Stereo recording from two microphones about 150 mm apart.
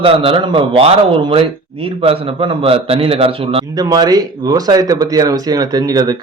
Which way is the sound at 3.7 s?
25° right (ahead or behind).